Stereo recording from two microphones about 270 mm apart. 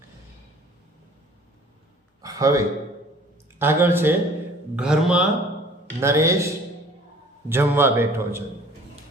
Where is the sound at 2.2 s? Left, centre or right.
Centre.